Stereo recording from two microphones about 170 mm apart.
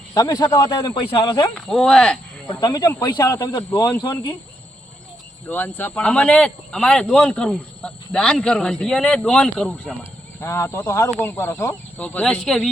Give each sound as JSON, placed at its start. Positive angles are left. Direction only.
{"t": 0.1, "sound": "speech", "side_deg": 20}
{"t": 1.5, "sound": "speech", "side_deg": 5}
{"t": 2.5, "sound": "speech", "side_deg": 25}
{"t": 5.5, "sound": "speech", "side_deg": 10}
{"t": 12.0, "sound": "speech", "side_deg": 5}